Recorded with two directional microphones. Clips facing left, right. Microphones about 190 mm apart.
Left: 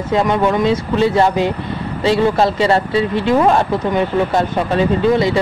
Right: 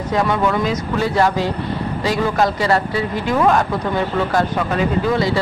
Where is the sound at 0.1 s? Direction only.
20° left (ahead or behind).